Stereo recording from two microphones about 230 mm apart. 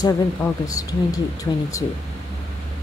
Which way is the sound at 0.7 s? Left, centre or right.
Centre.